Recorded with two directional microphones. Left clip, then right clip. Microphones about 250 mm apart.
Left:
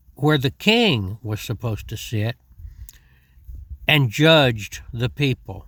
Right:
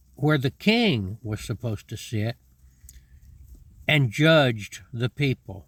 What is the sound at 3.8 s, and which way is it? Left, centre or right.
Speech, left.